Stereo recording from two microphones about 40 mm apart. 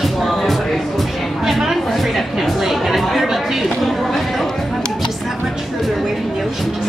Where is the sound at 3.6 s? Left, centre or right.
Centre.